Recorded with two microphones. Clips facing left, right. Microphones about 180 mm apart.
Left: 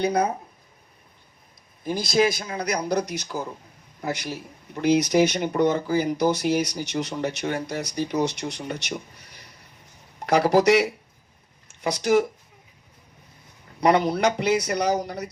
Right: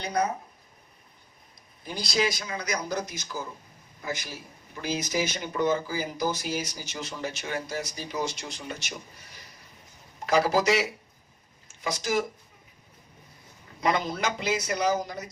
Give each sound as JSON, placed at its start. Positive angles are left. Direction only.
{"t": 0.0, "sound": "speech", "side_deg": 55}
{"t": 1.8, "sound": "a man's voice", "side_deg": 50}
{"t": 10.2, "sound": "speech", "side_deg": 65}
{"t": 13.8, "sound": "speech", "side_deg": 65}